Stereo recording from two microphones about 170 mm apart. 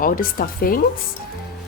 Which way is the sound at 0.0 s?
55° left (ahead or behind).